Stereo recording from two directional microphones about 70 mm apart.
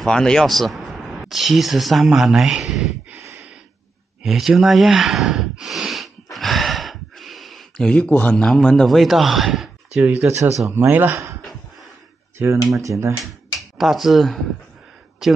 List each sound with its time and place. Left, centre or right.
0.0 s speech: centre
3.2 s a sound: right
4.2 s a sound: centre
6.3 s gasp: centre; by 8.5 s left
8.5 s speech: centre
10.1 s speech: right
12.4 s speech: right
12.7 s speech: right
13.7 s speech: centre